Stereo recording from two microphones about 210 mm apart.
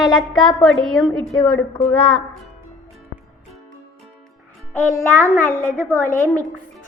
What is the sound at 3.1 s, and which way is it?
Music, 50° left (ahead or behind).